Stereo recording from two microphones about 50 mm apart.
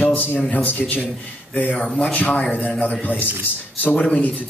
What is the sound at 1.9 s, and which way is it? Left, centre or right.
A man's voice, left.